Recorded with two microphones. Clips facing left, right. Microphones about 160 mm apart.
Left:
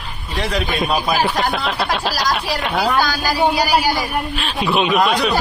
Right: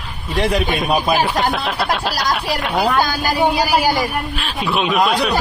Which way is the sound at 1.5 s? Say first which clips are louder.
Even; centre (ahead or behind).